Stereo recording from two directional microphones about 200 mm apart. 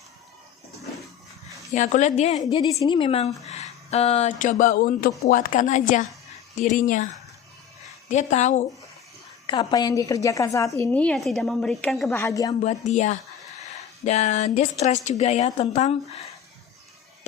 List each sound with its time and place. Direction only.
1.7 s speech: 35° left (ahead or behind)
2.4 s a woman's voice: 20° left (ahead or behind); by 7.1 s 40° left (ahead or behind)
8.1 s speech: 35° left (ahead or behind)
9.5 s a woman's voice: 25° left (ahead or behind); by 12.1 s centre (ahead or behind)
12.1 s a woman's voice: 15° left (ahead or behind)
12.5 s speech: 35° left (ahead or behind)